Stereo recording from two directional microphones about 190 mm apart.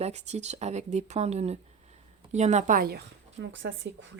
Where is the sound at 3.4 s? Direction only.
70° right (ahead or behind).